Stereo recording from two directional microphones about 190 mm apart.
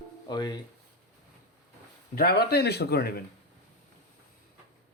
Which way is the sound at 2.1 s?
55° left (ahead or behind).